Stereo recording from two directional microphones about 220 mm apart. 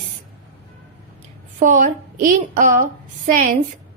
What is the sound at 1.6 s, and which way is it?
Speech, 35° right (ahead or behind).